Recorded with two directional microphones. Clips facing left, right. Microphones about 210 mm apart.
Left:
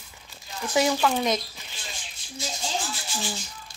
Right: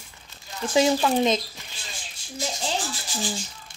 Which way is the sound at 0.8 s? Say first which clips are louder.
Right 3 dB; 25° right (ahead or behind).